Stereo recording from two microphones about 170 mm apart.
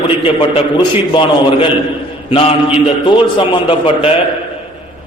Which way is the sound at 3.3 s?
30° left (ahead or behind).